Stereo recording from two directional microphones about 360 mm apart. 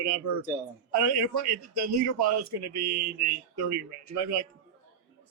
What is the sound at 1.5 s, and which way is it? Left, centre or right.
Speech, right.